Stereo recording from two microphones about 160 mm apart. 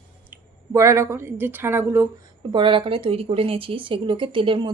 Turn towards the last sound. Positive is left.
turn(degrees=-30)  # may be behind; listen again after turning